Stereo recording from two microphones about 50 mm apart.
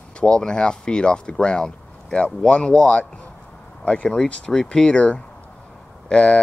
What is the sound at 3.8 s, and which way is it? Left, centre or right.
Speech, left.